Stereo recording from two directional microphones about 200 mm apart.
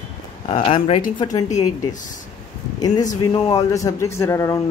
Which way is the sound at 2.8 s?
20° left (ahead or behind).